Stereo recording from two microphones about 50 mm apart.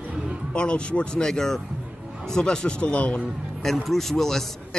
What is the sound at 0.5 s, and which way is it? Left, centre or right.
Speech, left.